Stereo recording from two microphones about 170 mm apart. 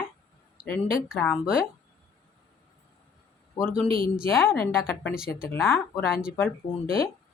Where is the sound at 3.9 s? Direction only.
55° left (ahead or behind).